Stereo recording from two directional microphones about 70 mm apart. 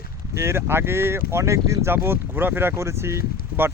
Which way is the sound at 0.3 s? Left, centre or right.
Right.